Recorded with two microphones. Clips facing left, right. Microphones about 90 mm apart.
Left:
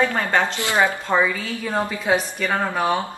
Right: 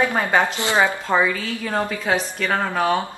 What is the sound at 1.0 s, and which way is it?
Speech, centre (ahead or behind).